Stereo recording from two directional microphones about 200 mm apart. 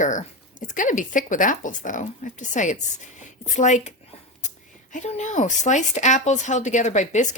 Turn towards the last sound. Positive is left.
turn(degrees=35)  # may be behind; listen again after turning